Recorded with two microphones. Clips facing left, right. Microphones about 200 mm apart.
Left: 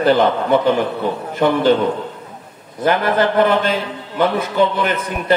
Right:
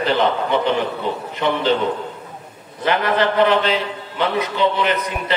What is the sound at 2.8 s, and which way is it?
A man's voice, 50° left (ahead or behind).